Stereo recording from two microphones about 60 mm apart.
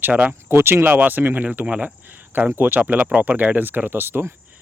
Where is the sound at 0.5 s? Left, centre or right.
Right.